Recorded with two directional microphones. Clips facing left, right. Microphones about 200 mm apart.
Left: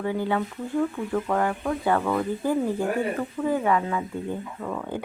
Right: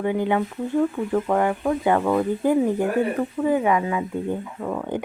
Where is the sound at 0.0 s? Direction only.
15° right (ahead or behind).